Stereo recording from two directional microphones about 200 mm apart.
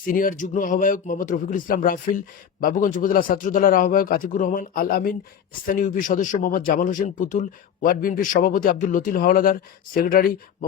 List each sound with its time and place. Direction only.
0.0 s speech: 45° left (ahead or behind)